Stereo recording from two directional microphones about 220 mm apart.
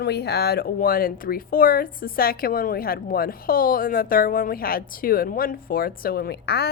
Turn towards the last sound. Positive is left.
turn(degrees=45)  # may be behind; listen again after turning